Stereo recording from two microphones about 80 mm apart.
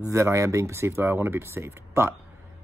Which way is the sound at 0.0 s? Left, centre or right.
Right.